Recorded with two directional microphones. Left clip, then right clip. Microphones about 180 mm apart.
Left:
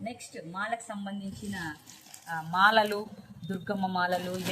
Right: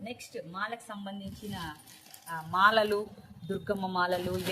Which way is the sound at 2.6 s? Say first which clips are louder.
Left 1 dB; 25° right (ahead or behind).